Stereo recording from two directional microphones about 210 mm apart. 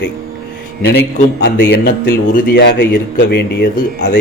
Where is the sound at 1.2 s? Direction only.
50° left (ahead or behind).